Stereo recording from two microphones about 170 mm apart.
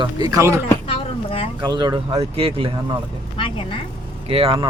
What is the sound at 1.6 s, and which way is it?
Speech, 25° right (ahead or behind).